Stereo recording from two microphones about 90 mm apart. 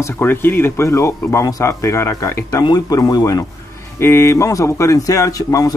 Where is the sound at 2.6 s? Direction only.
45° left (ahead or behind).